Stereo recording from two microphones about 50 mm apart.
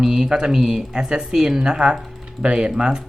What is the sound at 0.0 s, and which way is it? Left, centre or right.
Speech, centre.